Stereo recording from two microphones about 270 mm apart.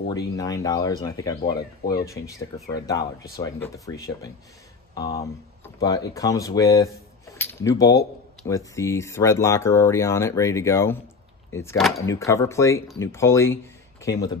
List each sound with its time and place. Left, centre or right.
0.4 s speech: centre
5.8 s speech: centre
7.3 s cutlery: centre
8.5 s speech: centre